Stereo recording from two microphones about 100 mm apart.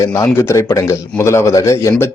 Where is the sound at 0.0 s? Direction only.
30° left (ahead or behind).